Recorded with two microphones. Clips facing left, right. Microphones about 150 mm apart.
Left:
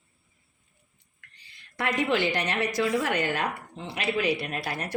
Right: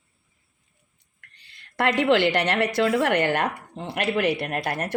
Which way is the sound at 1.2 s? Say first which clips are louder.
Right 2 dB; 65° right (ahead or behind).